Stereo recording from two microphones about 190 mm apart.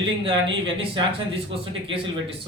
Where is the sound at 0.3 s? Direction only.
25° right (ahead or behind).